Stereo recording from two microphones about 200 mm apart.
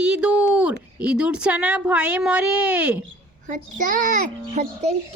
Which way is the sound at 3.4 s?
40° right (ahead or behind).